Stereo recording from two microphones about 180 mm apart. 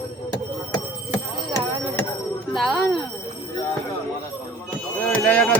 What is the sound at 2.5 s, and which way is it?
Speech, centre (ahead or behind).